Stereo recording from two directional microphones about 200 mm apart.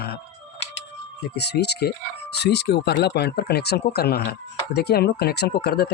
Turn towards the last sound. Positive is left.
turn(degrees=50)  # may be behind; listen again after turning